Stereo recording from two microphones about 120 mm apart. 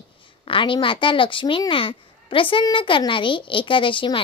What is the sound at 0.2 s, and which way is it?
A woman's voice, 45° left (ahead or behind).